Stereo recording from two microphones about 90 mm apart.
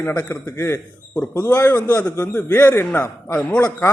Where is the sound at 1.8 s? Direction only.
15° left (ahead or behind).